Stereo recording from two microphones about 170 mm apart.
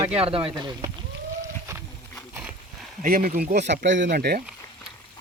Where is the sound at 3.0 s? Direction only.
55° right (ahead or behind).